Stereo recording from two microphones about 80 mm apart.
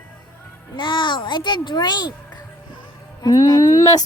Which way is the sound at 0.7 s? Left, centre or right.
Left.